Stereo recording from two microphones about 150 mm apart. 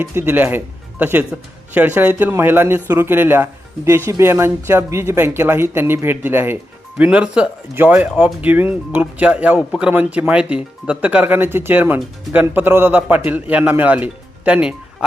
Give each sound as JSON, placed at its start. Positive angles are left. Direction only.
{"t": 0.0, "sound": "speech", "side_deg": -15}